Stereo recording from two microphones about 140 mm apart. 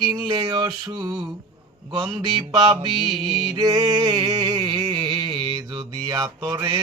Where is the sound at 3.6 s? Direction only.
25° right (ahead or behind).